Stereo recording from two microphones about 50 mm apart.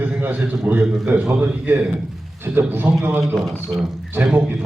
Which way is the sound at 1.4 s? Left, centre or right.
Right.